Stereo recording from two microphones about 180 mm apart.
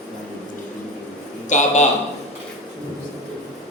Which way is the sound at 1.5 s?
40° left (ahead or behind).